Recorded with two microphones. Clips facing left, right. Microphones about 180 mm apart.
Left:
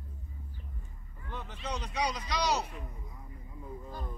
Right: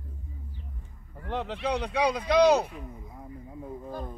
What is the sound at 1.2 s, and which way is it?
Speech, 65° right (ahead or behind).